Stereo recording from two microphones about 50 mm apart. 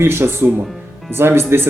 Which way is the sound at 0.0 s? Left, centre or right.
Right.